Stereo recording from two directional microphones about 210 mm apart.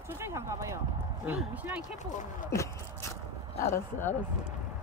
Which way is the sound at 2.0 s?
35° left (ahead or behind).